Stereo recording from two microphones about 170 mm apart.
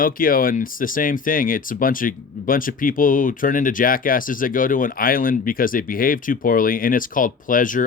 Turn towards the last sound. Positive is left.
turn(degrees=50)  # may be behind; listen again after turning